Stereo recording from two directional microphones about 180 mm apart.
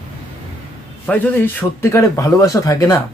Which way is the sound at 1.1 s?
10° left (ahead or behind).